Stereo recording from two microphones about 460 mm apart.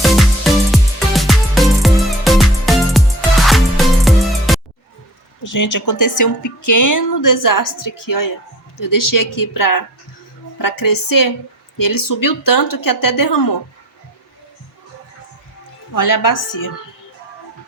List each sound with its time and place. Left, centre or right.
0.0 s music: centre
5.4 s speech: left
15.9 s speech: left